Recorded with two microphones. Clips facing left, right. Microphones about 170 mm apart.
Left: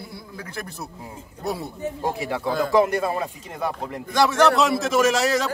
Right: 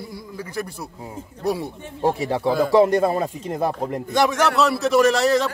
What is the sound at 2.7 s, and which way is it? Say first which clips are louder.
Speech: right 3 dB; 35° right (ahead or behind).